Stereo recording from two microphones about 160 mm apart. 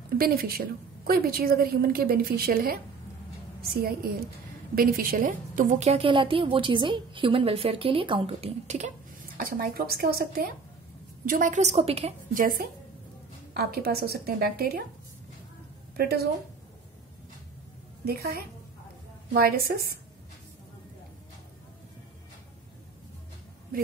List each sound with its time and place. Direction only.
0.2 s a woman's voice: 70° right (ahead or behind); by 8.9 s 45° right (ahead or behind)
9.4 s a woman's voice: 70° right (ahead or behind)
11.2 s a woman's voice: 55° right (ahead or behind)
12.4 s a woman's voice: 60° right (ahead or behind)
13.5 s a woman's voice: 75° right (ahead or behind)
16.0 s a woman's voice: 75° right (ahead or behind)
18.0 s a woman's voice: 75° right (ahead or behind)